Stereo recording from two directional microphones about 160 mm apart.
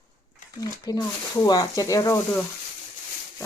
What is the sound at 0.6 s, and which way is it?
Speech, 25° left (ahead or behind).